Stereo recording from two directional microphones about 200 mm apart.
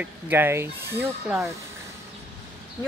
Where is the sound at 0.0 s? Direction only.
10° right (ahead or behind).